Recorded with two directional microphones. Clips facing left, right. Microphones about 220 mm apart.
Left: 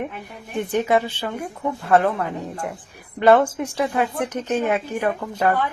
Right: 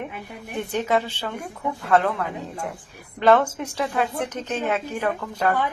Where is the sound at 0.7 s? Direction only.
15° left (ahead or behind).